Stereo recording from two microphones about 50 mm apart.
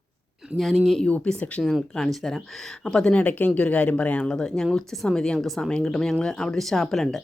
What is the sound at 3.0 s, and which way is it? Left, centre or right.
Speech, left.